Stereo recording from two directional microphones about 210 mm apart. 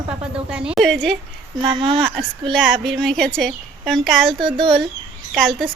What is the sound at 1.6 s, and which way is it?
Speech, 25° right (ahead or behind).